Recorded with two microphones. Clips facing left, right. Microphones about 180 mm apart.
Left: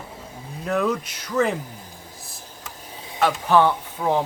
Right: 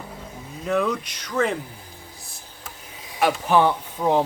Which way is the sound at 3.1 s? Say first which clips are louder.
Left 1 dB; 15° right (ahead or behind).